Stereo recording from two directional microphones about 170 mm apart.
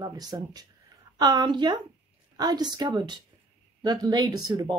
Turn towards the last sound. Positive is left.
turn(degrees=-25)  # may be behind; listen again after turning